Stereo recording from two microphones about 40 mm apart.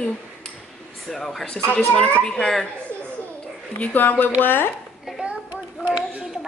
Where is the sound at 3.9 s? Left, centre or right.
Left.